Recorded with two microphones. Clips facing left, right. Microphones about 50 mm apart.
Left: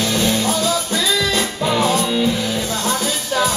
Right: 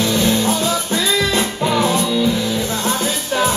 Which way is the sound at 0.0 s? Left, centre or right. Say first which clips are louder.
Right 2 dB; right.